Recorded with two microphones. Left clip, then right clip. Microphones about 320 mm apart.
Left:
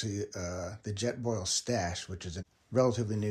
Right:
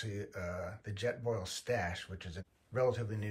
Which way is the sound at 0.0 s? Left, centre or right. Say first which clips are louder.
Left 5 dB; centre.